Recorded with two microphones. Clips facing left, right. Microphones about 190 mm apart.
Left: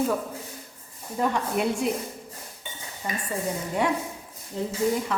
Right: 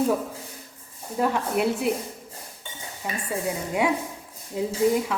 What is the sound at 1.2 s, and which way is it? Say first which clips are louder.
Speech: right 2 dB; 5° right (ahead or behind).